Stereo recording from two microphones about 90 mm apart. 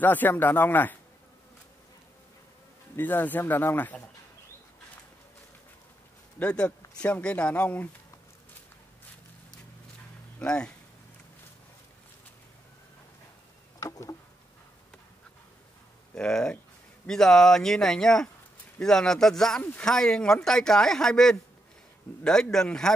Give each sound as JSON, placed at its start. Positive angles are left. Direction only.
{"t": 0.0, "sound": "speech", "side_deg": 20}
{"t": 3.0, "sound": "speech", "side_deg": 20}
{"t": 6.4, "sound": "speech", "side_deg": 10}
{"t": 10.4, "sound": "speech", "side_deg": 10}
{"t": 13.7, "sound": "a sound", "side_deg": 40}
{"t": 16.2, "sound": "a man's voice", "side_deg": 10}